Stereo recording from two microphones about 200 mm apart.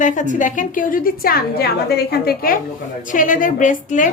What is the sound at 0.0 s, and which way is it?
A woman's voice, 40° left (ahead or behind).